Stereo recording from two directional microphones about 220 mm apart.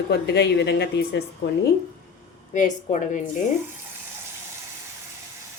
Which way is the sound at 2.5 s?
35° left (ahead or behind).